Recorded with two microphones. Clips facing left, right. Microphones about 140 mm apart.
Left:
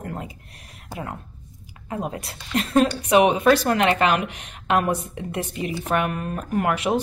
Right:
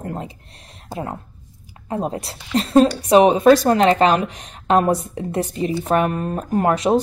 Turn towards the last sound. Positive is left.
turn(degrees=-35)  # may be behind; listen again after turning